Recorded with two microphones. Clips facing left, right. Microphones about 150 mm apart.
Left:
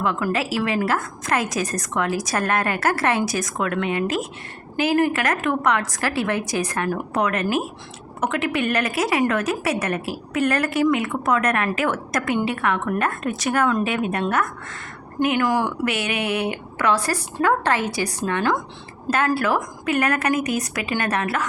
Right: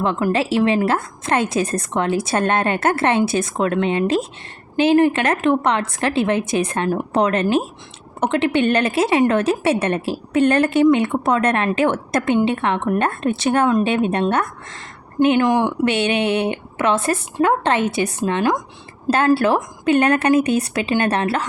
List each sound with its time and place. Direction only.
0.0 s a woman's voice: 25° right (ahead or behind)
19.1 s a woman's voice: 30° right (ahead or behind)